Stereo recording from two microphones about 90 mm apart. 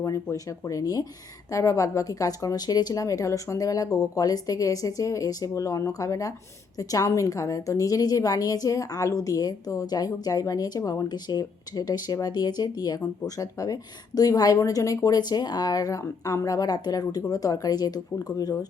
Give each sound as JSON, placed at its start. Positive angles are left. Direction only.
{"t": 0.0, "sound": "a woman's voice", "side_deg": 40}